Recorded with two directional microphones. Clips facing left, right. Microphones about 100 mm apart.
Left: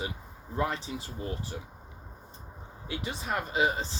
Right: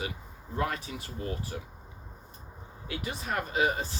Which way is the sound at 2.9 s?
25° left (ahead or behind).